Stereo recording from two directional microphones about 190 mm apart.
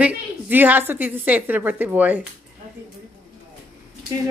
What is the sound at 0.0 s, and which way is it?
A woman's voice, 10° right (ahead or behind).